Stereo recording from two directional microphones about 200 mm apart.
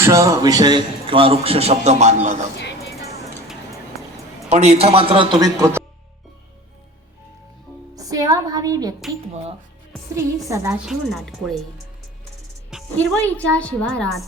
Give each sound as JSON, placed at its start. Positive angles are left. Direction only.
{"t": 0.0, "sound": "a man's voice", "side_deg": -15}
{"t": 4.4, "sound": "a man's voice", "side_deg": -35}
{"t": 7.9, "sound": "a woman's voice", "side_deg": -15}
{"t": 9.3, "sound": "speech", "side_deg": -35}
{"t": 10.2, "sound": "a woman's voice", "side_deg": -15}
{"t": 10.8, "sound": "speech", "side_deg": 0}
{"t": 12.7, "sound": "speech", "side_deg": 5}